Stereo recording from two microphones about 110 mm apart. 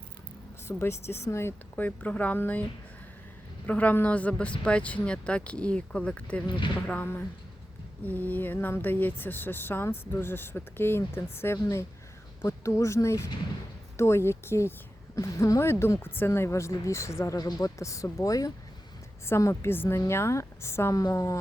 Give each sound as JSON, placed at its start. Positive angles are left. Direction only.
{"t": 0.7, "sound": "speech", "side_deg": 25}
{"t": 3.7, "sound": "speech", "side_deg": 15}